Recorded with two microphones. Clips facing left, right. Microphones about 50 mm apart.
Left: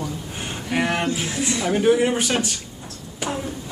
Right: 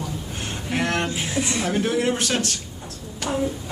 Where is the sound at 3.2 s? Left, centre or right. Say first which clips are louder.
Even; centre.